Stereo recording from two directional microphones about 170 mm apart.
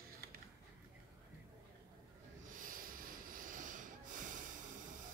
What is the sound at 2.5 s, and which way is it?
Snort, 55° right (ahead or behind).